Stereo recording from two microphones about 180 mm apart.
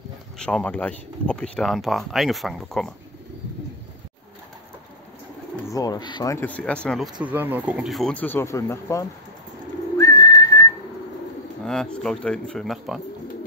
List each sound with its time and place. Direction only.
0.4 s speech: 5° left (ahead or behind)
5.7 s speech: 20° left (ahead or behind)
6.4 s speech: 5° left (ahead or behind)
7.2 s speech: 10° right (ahead or behind); by 9.0 s 15° left (ahead or behind)
9.9 s bird: 20° left (ahead or behind)
11.6 s speech: 5° left (ahead or behind)